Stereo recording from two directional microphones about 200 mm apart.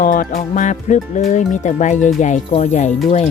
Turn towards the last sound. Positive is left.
turn(degrees=35)  # may be behind; listen again after turning